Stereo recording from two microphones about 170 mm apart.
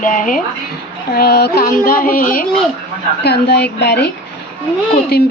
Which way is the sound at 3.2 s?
75° left (ahead or behind).